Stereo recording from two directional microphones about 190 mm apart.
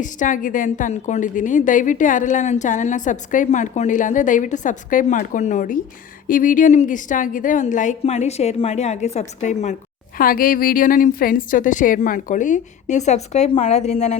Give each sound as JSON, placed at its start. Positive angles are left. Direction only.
{"t": 0.0, "sound": "a woman's voice", "side_deg": 45}
{"t": 10.2, "sound": "a woman's voice", "side_deg": 50}